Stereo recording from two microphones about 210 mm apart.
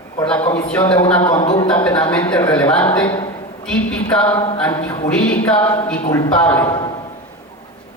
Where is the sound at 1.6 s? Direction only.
5° left (ahead or behind).